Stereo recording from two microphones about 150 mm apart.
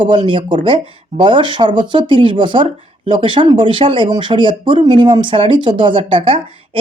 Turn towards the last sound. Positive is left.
turn(degrees=-35)  # may be behind; listen again after turning